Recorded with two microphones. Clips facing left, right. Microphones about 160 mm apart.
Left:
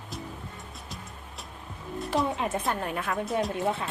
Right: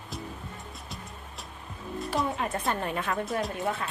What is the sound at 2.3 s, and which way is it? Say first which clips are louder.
Speech: left 1 dB; 20° left (ahead or behind).